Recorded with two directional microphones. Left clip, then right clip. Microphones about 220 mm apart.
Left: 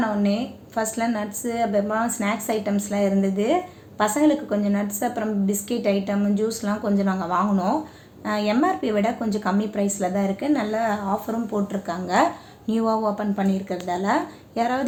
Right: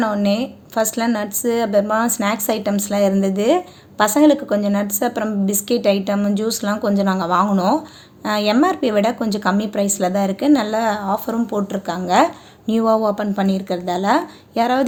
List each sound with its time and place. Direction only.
0.0 s a woman's voice: 50° right (ahead or behind)